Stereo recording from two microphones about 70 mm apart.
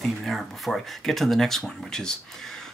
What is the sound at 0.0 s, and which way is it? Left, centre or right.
Speech, centre.